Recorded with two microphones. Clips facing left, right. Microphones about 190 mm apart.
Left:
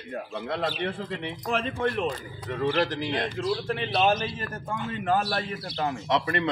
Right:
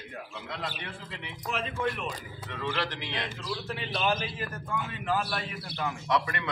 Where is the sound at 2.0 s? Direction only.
40° left (ahead or behind).